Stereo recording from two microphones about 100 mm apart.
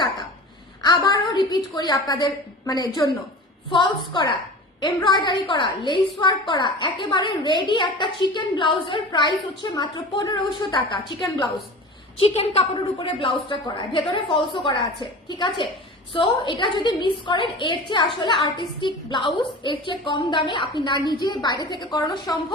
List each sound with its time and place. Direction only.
0.9 s a woman's voice: 40° left (ahead or behind)
3.7 s a woman's voice: 50° left (ahead or behind)
12.1 s a woman's voice: 80° left; by 22.5 s 45° left (ahead or behind)